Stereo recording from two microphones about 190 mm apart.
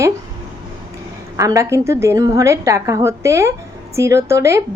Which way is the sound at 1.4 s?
15° right (ahead or behind).